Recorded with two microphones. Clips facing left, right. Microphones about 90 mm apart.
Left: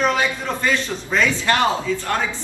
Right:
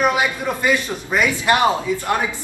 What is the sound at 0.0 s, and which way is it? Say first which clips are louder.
A man's voice: right 2 dB; 15° right (ahead or behind).